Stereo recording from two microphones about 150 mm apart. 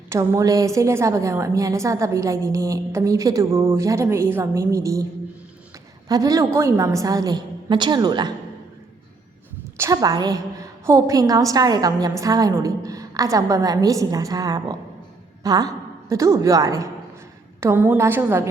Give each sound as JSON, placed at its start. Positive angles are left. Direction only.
{"t": 0.1, "sound": "a woman's voice", "side_deg": -20}
{"t": 6.1, "sound": "a woman's voice", "side_deg": -25}
{"t": 9.7, "sound": "a woman's voice", "side_deg": -20}